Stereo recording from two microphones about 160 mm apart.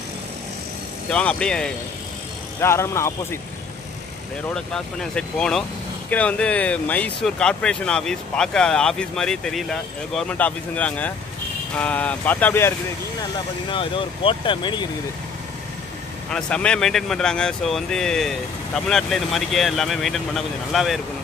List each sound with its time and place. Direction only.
1.1 s speech: 5° left (ahead or behind)
2.6 s speech: 15° left (ahead or behind)
4.6 s speech: 5° left (ahead or behind)
13.7 s speech: 35° left (ahead or behind)
16.3 s speech: 5° left (ahead or behind)